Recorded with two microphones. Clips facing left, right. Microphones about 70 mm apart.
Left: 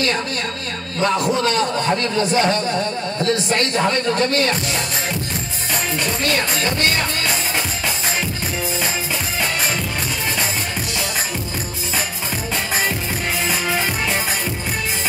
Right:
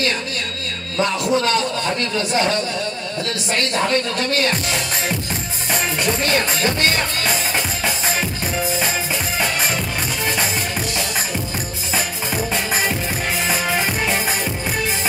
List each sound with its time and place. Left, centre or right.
1.0 s a man's voice: left
6.2 s music: right